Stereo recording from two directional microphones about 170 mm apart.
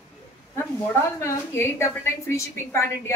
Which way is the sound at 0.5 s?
15° left (ahead or behind).